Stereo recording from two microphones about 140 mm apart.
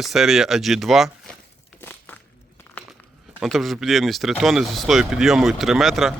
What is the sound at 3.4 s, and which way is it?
Speech, centre (ahead or behind).